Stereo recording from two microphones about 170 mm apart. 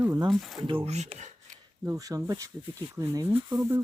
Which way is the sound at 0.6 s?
30° right (ahead or behind).